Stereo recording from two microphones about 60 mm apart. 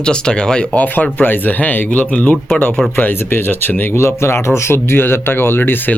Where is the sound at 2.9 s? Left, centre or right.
Left.